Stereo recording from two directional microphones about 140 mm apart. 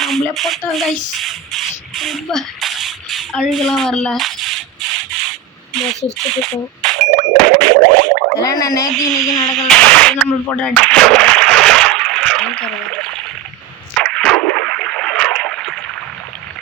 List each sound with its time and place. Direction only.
0.0 s speech: centre (ahead or behind)
7.3 s boing: 10° left (ahead or behind)
8.4 s speech: 25° left (ahead or behind)
9.6 s a sound: 5° left (ahead or behind)